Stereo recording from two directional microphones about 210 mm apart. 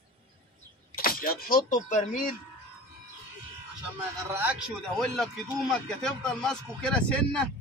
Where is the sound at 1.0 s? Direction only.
45° left (ahead or behind).